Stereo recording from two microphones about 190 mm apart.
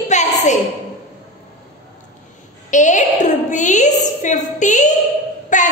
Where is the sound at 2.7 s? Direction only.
40° left (ahead or behind).